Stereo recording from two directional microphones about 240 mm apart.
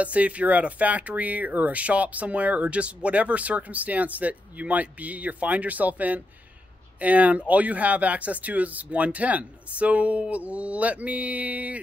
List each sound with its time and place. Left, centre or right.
0.0 s speech: centre